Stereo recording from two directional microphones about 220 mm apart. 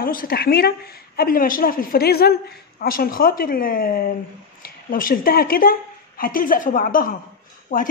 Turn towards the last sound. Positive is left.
turn(degrees=40)  # may be behind; listen again after turning